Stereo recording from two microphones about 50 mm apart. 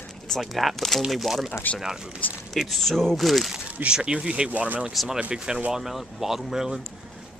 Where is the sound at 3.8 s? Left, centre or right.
Centre.